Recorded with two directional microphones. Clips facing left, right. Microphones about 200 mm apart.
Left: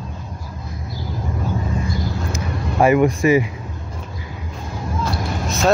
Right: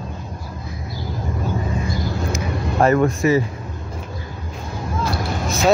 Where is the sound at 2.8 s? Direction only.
10° left (ahead or behind).